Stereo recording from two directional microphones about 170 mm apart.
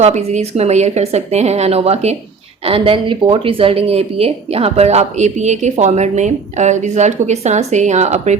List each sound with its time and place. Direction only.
0.0 s speech: 40° right (ahead or behind)